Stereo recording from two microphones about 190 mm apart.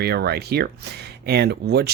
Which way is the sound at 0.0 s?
60° right (ahead or behind).